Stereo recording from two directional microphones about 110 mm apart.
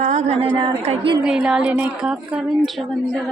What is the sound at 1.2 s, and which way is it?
Speech, 5° right (ahead or behind).